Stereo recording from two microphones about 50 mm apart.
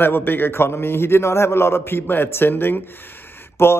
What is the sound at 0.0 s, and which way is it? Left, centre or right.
A man's voice, left.